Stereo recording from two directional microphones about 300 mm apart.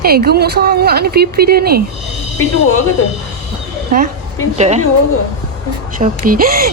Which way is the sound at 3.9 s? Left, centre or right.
Right.